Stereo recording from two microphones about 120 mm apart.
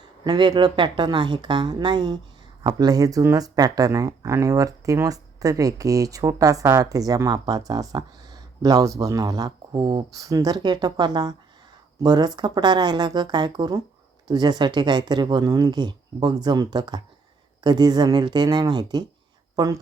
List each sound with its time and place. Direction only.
0.3 s speech: 35° right (ahead or behind)